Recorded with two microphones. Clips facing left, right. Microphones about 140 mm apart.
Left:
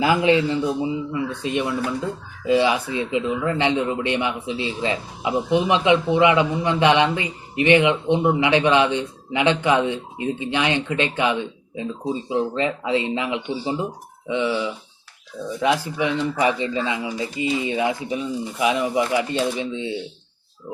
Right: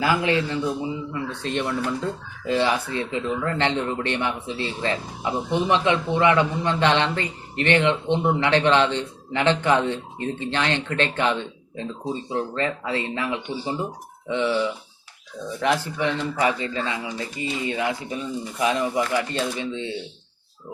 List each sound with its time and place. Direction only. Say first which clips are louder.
0.0 s a man's voice: left 4 dB; 20° left (ahead or behind)